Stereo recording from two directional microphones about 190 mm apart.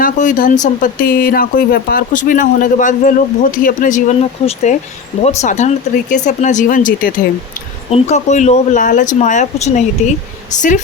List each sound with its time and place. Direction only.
0.0 s speech: 45° left (ahead or behind)